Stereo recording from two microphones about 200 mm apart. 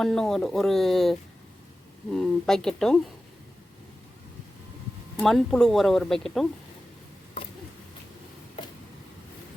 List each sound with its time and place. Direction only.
0.0 s speech: centre (ahead or behind)
5.2 s speech: centre (ahead or behind)